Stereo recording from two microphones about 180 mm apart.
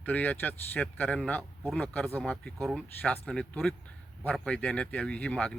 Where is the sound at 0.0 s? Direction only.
10° left (ahead or behind).